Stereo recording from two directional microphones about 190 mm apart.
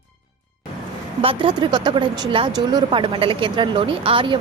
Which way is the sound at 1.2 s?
30° right (ahead or behind).